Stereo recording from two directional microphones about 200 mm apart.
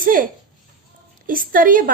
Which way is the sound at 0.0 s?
45° right (ahead or behind).